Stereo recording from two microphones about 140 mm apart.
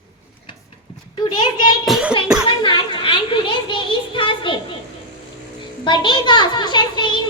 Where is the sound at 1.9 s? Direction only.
5° right (ahead or behind).